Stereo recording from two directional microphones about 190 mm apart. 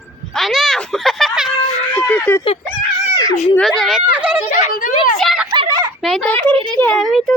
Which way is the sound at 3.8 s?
5° right (ahead or behind).